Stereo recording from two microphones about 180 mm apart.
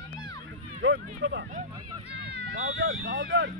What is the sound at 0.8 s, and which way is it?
Speech, 85° right.